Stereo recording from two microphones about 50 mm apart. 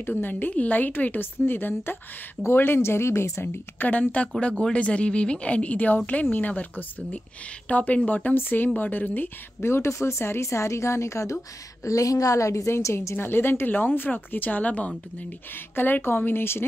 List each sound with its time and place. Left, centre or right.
0.2 s speech: left
3.5 s speech: left
9.6 s a woman's voice: left
13.1 s speech: left
15.7 s speech: left